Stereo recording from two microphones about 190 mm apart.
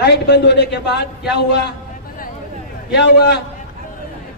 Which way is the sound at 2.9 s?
60° left (ahead or behind).